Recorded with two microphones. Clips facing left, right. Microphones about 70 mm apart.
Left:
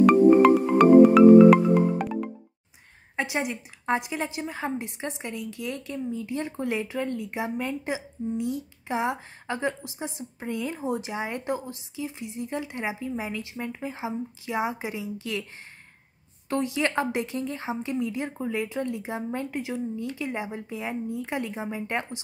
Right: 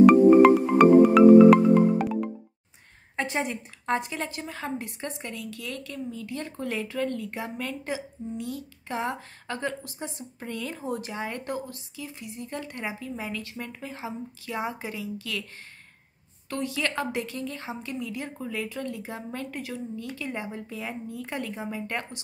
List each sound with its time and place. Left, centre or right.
0.0 s music: centre
3.2 s a woman's voice: centre; by 15.4 s left
16.4 s a woman's voice: left